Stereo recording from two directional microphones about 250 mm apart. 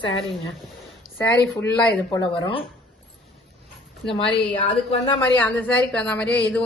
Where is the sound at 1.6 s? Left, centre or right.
Centre.